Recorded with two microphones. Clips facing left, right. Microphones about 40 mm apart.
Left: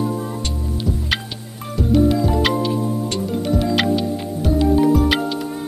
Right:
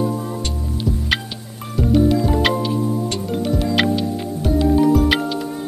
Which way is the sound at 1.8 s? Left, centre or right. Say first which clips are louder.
Even; centre.